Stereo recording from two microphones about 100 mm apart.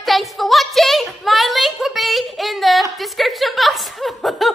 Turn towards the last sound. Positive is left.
turn(degrees=0)  # may be behind; listen again after turning